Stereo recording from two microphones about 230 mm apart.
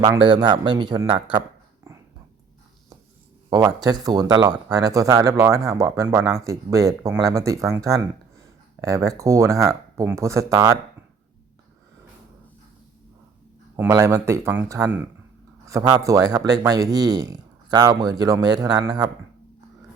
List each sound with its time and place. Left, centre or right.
0.0 s speech: centre
3.5 s speech: centre
13.7 s speech: centre